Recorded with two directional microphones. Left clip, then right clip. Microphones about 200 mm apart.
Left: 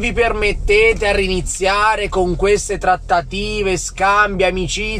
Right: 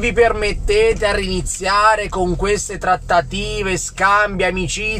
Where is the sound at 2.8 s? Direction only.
10° right (ahead or behind).